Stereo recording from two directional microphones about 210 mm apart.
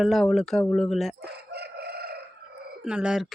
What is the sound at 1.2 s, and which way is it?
Chicken, 50° right (ahead or behind).